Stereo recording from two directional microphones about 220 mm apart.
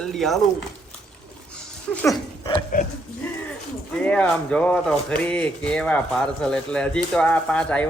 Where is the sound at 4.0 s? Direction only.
5° left (ahead or behind).